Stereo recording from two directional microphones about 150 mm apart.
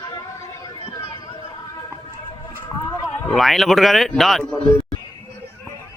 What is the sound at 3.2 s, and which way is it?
A man's voice, 5° left (ahead or behind).